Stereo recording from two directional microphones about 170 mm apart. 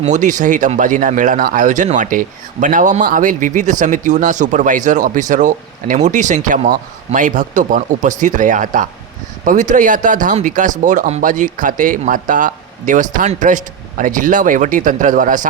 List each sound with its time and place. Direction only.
0.0 s speech: 45° right (ahead or behind)